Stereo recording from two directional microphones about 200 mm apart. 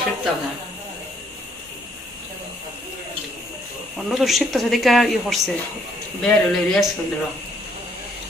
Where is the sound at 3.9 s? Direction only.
Centre (ahead or behind).